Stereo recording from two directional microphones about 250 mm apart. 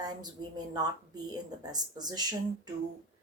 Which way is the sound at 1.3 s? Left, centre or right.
Centre.